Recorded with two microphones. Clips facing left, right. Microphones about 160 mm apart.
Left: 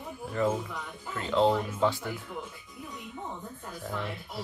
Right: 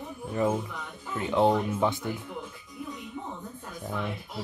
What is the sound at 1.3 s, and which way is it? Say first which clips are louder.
Speech: right 1 dB; 15° right (ahead or behind).